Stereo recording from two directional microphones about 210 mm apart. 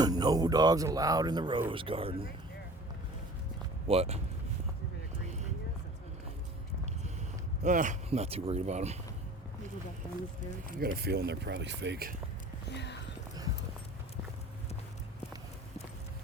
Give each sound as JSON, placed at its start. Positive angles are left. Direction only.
{"t": 0.0, "sound": "speech", "side_deg": -20}
{"t": 3.8, "sound": "speech", "side_deg": -30}
{"t": 7.6, "sound": "speech", "side_deg": -35}
{"t": 10.8, "sound": "speech", "side_deg": -45}
{"t": 12.7, "sound": "clip-clop", "side_deg": 55}